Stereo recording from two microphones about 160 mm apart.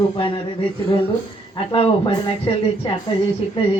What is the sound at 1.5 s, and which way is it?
Speech, 35° left (ahead or behind).